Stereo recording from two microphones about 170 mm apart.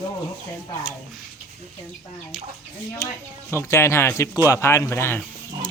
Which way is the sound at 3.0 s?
15° left (ahead or behind).